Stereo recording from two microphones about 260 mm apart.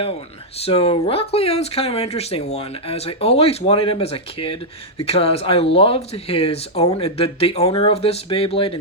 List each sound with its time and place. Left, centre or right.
0.6 s speech: left